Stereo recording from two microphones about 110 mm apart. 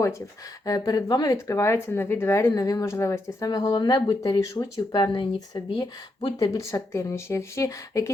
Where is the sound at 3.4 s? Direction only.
40° left (ahead or behind).